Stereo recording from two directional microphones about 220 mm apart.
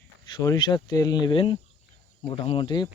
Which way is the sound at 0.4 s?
20° left (ahead or behind).